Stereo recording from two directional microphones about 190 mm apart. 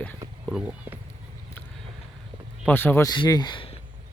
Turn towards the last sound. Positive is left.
turn(degrees=25)  # may be behind; listen again after turning